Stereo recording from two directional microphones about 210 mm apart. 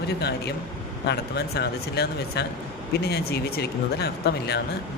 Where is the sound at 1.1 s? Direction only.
50° left (ahead or behind).